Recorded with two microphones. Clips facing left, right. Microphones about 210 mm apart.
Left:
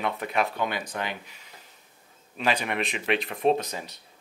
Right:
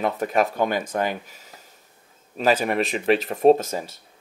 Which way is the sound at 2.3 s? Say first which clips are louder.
Right 7 dB; 40° right (ahead or behind).